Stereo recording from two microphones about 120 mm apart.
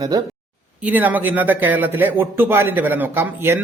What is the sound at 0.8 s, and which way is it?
A man's voice, 15° right (ahead or behind).